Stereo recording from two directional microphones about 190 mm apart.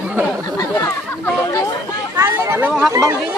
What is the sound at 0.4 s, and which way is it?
Chatter, 20° left (ahead or behind).